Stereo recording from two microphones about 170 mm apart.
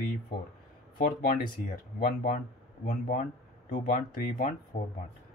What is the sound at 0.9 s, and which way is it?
Speech, 55° left (ahead or behind).